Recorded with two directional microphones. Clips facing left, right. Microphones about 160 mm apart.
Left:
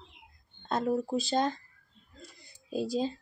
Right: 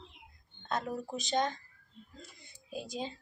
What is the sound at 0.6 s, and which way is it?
Speech, 35° left (ahead or behind).